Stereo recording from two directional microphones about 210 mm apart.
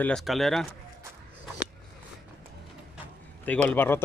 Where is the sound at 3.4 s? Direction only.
5° left (ahead or behind).